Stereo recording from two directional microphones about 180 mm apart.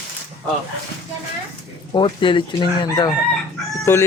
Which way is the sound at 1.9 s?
25° left (ahead or behind).